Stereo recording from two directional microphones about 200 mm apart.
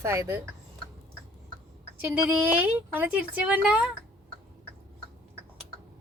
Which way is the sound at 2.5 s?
5° right (ahead or behind).